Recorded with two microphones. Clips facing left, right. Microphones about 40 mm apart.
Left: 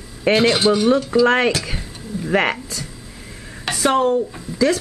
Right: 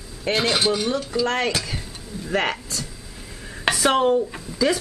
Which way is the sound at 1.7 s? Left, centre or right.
Centre.